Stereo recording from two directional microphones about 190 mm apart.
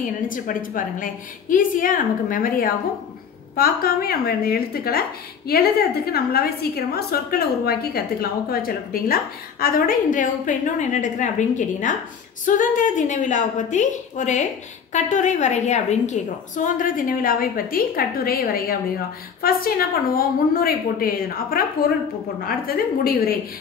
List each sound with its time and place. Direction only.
0.0 s a woman's voice: 45° left (ahead or behind)